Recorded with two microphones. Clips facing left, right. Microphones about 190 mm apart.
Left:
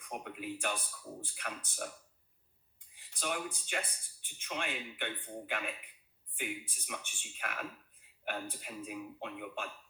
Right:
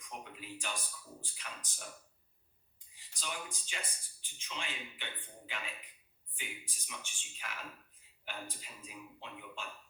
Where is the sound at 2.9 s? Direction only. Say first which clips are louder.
Left 6 dB; 60° left (ahead or behind).